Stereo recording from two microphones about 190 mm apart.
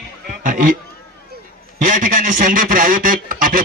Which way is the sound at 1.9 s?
45° right (ahead or behind).